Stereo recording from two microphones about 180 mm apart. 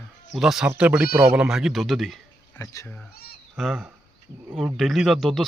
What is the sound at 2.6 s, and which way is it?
Speech, 20° left (ahead or behind).